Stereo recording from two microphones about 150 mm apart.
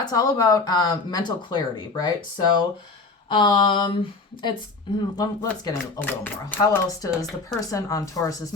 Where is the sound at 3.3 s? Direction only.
30° left (ahead or behind).